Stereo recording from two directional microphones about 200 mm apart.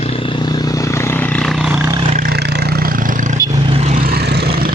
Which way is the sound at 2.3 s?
55° right (ahead or behind).